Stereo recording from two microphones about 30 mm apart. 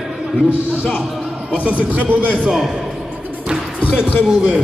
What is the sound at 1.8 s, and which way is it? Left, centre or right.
Speech, right.